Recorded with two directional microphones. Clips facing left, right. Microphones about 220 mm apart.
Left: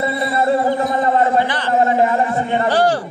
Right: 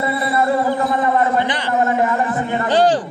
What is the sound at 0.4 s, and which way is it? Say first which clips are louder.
Speech: left 2 dB; 25° left (ahead or behind).